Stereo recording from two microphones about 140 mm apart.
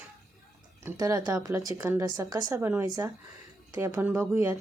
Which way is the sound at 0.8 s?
25° right (ahead or behind).